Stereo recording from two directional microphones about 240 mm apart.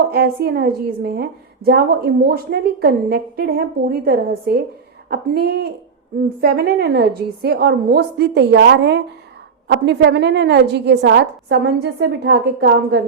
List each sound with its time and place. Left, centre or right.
0.1 s a woman's voice: right